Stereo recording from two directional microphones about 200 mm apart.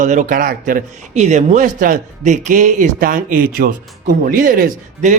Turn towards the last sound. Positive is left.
turn(degrees=-40)  # may be behind; listen again after turning